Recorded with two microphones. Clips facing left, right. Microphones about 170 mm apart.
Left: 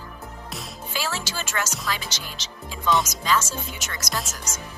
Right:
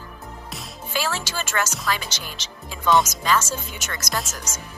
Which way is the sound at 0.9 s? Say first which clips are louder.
Right 3 dB; 55° right (ahead or behind).